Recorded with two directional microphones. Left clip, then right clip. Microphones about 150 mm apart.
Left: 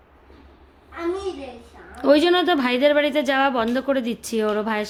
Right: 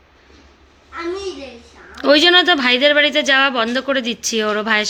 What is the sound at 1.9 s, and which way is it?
Speech, 10° left (ahead or behind).